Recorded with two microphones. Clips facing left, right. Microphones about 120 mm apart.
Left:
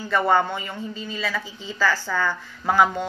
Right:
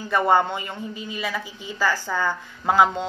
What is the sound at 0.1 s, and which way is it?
A woman's voice, 15° right (ahead or behind).